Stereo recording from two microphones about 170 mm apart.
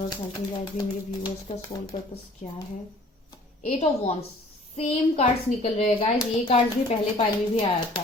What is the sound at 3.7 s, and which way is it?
A child's voice, 35° left (ahead or behind).